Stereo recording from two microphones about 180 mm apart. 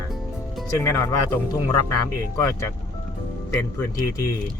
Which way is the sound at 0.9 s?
15° left (ahead or behind).